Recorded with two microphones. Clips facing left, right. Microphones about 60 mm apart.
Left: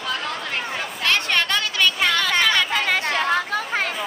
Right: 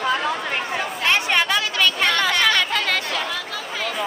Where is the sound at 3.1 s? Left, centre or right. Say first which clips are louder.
Left 5 dB; left.